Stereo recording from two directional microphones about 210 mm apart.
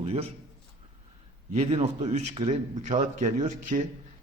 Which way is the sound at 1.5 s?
30° right (ahead or behind).